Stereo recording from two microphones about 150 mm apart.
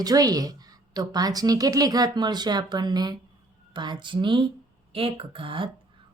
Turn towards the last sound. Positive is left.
turn(degrees=-35)  # may be behind; listen again after turning